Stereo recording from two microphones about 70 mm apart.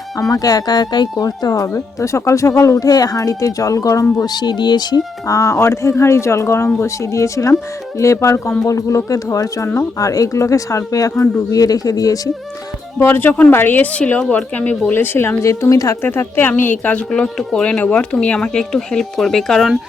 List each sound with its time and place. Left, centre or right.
0.2 s speech: left
4.2 s speech: left
5.2 s speech: left
13.0 s a woman's voice: left
14.9 s speech: left
15.4 s speech: left
16.0 s speech: left; by 19.8 s centre